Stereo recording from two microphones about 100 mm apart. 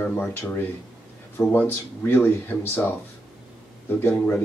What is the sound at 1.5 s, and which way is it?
Speech, 20° left (ahead or behind).